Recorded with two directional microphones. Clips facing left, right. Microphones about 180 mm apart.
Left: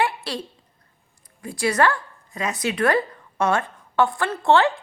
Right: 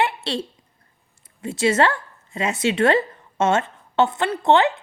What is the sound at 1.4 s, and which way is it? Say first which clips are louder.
Speech: right 2 dB; 25° right (ahead or behind).